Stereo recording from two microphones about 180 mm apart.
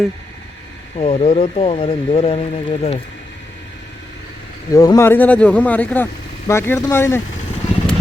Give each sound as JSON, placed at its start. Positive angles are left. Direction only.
{"t": 0.9, "sound": "speech", "side_deg": 35}
{"t": 4.7, "sound": "speech", "side_deg": 20}